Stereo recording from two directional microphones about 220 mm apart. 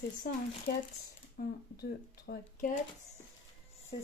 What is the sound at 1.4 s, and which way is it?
Speech, 40° left (ahead or behind).